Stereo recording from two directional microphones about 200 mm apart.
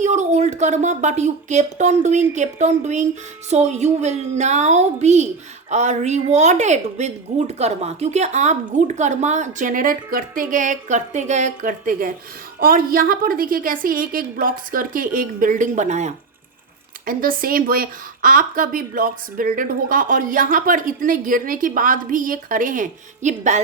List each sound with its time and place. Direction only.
0.0 s a woman's voice: 35° right (ahead or behind)
17.1 s speech: 45° right (ahead or behind)